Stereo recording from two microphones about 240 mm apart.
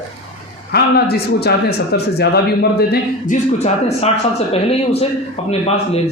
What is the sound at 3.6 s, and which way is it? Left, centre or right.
A woman's voice, left.